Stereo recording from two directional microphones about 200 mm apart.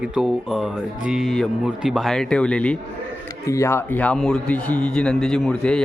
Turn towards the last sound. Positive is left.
turn(degrees=5)  # may be behind; listen again after turning